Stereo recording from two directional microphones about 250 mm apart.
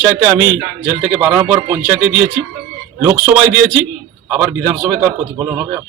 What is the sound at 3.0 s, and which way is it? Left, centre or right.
A man's voice, centre.